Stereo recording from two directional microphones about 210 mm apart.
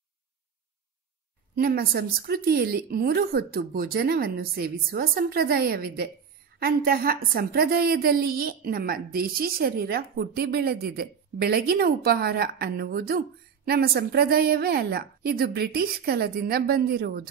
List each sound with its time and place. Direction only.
1.5 s a woman's voice: 50° right (ahead or behind)